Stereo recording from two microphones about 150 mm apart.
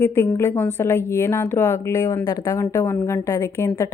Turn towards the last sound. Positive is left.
turn(degrees=15)  # may be behind; listen again after turning